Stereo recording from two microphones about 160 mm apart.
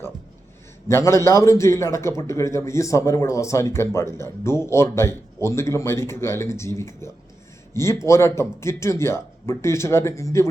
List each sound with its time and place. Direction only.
0.9 s a man's voice: 15° left (ahead or behind)